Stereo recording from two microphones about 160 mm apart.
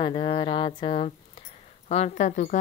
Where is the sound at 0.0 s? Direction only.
30° left (ahead or behind).